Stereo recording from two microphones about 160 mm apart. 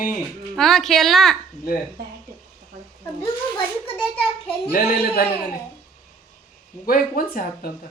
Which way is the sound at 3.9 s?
10° left (ahead or behind).